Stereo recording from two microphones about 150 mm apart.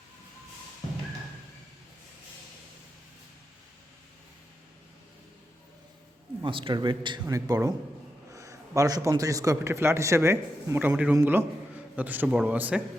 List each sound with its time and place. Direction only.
6.4 s a man's voice: 35° right (ahead or behind); by 12.8 s 10° right (ahead or behind)